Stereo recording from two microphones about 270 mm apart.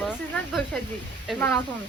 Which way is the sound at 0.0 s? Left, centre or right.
Centre.